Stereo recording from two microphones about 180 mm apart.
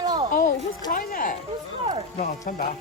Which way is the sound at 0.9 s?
50° left (ahead or behind).